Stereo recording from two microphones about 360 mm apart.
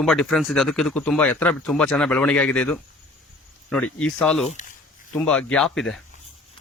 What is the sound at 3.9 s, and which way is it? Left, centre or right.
Speech, centre.